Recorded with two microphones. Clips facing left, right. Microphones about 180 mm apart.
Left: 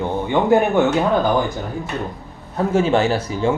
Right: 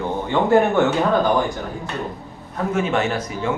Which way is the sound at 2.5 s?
30° left (ahead or behind).